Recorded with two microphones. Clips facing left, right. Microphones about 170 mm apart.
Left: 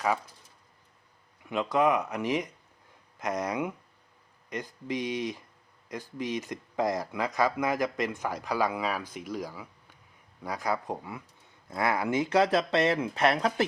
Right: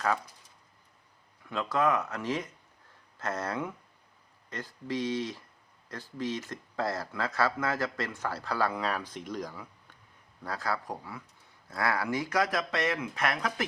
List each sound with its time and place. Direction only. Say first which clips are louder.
1.5 s speech: left 3 dB; 20° left (ahead or behind)